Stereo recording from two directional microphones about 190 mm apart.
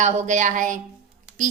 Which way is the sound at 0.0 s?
40° right (ahead or behind).